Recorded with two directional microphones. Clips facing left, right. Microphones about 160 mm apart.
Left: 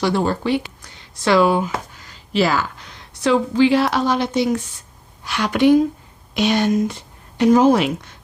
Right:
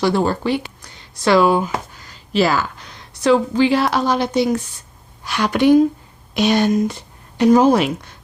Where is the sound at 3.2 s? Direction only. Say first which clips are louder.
Right 1 dB; 40° right (ahead or behind).